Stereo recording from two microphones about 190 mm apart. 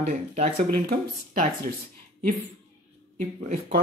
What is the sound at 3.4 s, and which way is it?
Speech, 45° right (ahead or behind).